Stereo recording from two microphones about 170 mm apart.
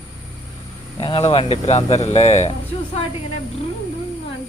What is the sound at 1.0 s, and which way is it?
Speech, 30° left (ahead or behind).